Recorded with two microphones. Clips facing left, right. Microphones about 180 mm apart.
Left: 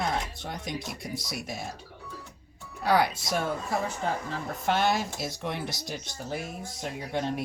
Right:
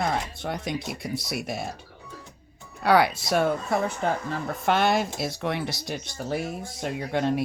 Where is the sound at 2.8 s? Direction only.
65° right (ahead or behind).